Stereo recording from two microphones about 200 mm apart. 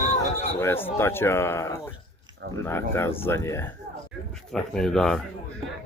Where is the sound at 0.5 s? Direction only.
10° left (ahead or behind).